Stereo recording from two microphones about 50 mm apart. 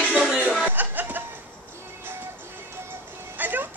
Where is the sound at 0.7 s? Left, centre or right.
Right.